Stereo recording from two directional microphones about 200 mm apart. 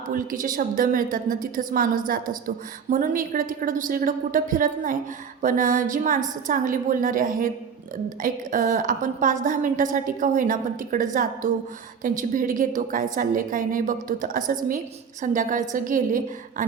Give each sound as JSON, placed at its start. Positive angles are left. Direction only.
{"t": 0.1, "sound": "a woman's voice", "side_deg": -40}